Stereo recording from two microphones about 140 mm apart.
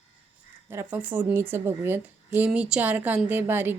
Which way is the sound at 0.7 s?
15° right (ahead or behind).